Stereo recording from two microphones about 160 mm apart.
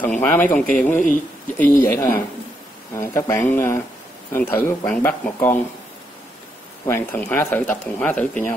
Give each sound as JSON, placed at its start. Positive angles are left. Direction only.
{"t": 0.0, "sound": "speech", "side_deg": 10}
{"t": 0.9, "sound": "speech", "side_deg": 55}
{"t": 1.6, "sound": "speech", "side_deg": 15}
{"t": 6.9, "sound": "speech", "side_deg": 15}